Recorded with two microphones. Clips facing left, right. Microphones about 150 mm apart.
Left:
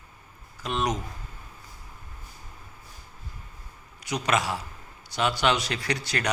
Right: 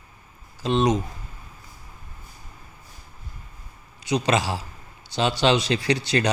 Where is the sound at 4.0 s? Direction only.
25° right (ahead or behind).